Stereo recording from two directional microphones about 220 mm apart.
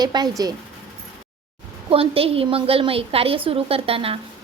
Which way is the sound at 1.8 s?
25° right (ahead or behind).